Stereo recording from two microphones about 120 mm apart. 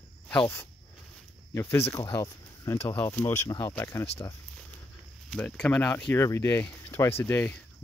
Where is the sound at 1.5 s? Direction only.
20° left (ahead or behind).